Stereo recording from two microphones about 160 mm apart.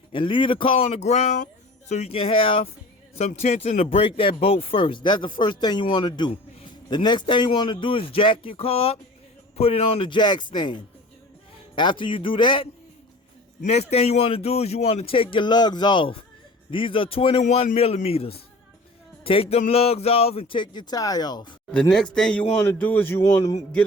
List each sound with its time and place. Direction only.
0.1 s a man's voice: 30° left (ahead or behind)
3.2 s a man's voice: 45° left (ahead or behind)
13.6 s a man's voice: 45° left (ahead or behind); by 21.5 s 25° left (ahead or behind)
21.7 s a man's voice: 5° left (ahead or behind); by 23.6 s 20° left (ahead or behind)